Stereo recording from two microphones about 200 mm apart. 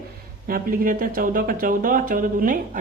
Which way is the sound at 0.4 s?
45° right (ahead or behind).